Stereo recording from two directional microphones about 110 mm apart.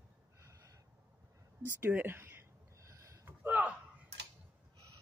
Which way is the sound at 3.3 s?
15° right (ahead or behind).